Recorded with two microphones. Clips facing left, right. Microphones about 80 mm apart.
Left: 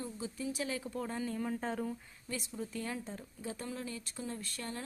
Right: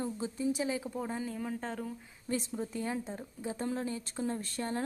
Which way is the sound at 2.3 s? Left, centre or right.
Right.